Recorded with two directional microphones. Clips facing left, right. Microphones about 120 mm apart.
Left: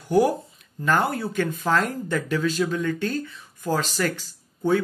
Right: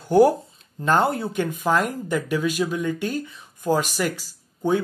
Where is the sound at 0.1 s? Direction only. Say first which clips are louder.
Right 4 dB; 30° right (ahead or behind).